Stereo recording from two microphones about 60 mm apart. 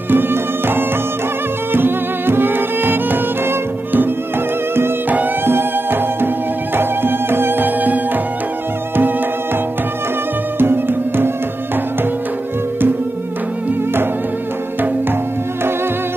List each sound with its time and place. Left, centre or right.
0.1 s music: right
5.1 s music: right
10.6 s music: right